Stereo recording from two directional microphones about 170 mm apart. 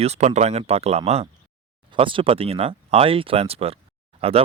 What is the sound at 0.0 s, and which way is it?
Speech, 40° right (ahead or behind).